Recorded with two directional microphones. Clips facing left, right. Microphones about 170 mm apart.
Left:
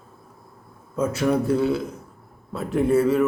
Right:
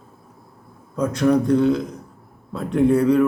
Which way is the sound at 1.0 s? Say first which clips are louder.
Right 3 dB; 5° left (ahead or behind).